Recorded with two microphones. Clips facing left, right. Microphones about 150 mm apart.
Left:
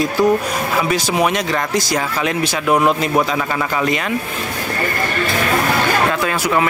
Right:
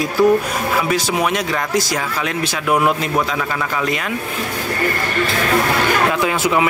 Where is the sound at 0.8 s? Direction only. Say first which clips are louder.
Left 1 dB; centre (ahead or behind).